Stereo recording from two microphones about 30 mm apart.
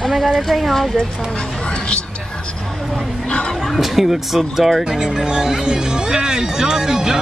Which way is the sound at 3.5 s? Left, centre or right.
Centre.